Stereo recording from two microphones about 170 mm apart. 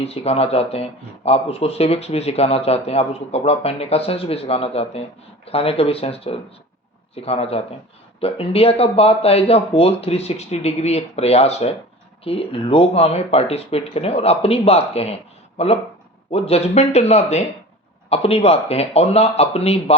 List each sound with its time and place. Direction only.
0.0 s speech: 35° left (ahead or behind)